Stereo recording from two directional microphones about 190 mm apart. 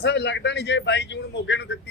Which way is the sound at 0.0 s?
65° left (ahead or behind).